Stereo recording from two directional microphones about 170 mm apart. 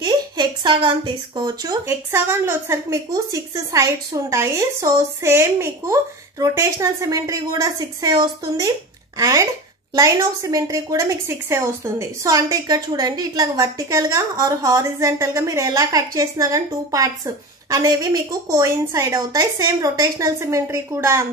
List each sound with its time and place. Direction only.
0.0 s a woman's voice: 25° right (ahead or behind)